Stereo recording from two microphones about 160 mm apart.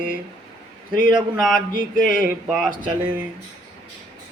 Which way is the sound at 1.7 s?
60° left (ahead or behind).